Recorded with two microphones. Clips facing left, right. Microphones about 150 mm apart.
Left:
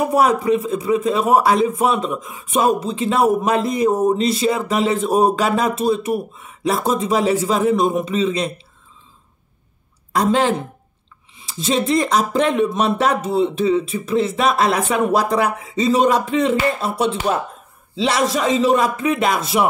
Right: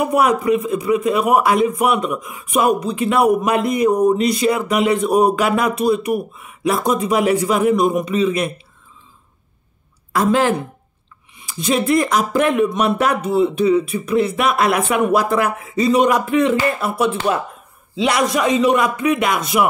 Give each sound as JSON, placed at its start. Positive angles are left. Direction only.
{"t": 0.0, "sound": "a man's voice", "side_deg": 30}
{"t": 10.1, "sound": "a woman's voice", "side_deg": 20}
{"t": 18.3, "sound": "a man's voice", "side_deg": 25}